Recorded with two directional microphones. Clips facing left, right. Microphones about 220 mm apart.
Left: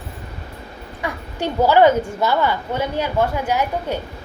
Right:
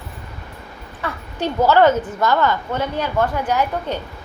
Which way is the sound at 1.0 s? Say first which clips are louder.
Even; 10° left (ahead or behind).